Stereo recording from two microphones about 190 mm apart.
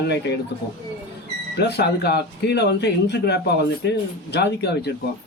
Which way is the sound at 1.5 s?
60° left (ahead or behind).